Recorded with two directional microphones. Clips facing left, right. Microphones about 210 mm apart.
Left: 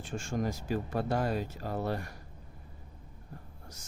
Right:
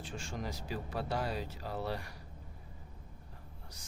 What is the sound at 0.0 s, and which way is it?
Speech, 50° left (ahead or behind).